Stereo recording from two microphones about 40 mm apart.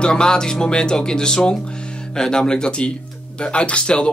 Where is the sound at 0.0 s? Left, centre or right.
Left.